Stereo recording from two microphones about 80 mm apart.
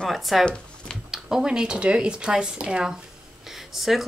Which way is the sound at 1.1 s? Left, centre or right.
Centre.